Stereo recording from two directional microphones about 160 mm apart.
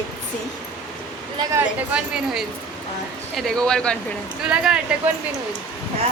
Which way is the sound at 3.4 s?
5° left (ahead or behind).